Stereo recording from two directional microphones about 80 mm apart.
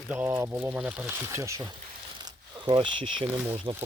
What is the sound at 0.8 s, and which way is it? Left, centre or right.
Speech, centre.